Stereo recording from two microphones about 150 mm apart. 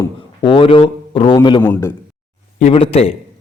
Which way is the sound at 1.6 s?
15° left (ahead or behind).